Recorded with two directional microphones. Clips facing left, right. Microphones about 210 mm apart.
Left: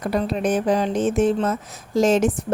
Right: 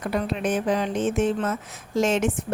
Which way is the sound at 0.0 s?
35° left (ahead or behind).